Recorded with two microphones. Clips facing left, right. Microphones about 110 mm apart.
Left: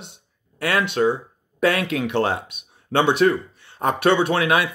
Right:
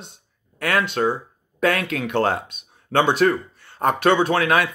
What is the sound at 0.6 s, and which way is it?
Speech, 20° left (ahead or behind).